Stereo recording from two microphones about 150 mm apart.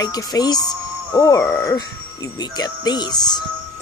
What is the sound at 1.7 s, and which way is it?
Speech, 25° left (ahead or behind).